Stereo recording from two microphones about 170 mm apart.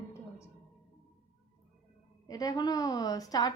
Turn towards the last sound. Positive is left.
turn(degrees=20)  # may be behind; listen again after turning